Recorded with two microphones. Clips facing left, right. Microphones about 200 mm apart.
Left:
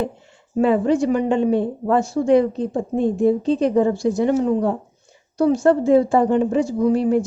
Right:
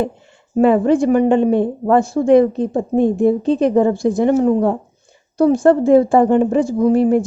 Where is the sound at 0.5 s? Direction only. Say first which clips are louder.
Right 4 dB; 55° right (ahead or behind).